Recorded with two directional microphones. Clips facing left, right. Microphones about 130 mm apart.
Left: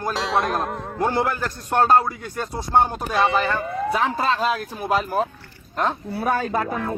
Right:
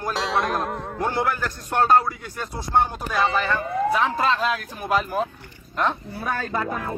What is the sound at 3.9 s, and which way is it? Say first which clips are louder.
Speech: even; 30° left (ahead or behind).